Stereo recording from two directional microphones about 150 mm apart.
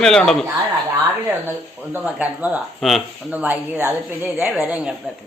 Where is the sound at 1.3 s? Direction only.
15° right (ahead or behind).